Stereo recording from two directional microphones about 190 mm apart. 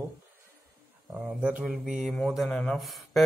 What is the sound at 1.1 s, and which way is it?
Speech, 5° right (ahead or behind).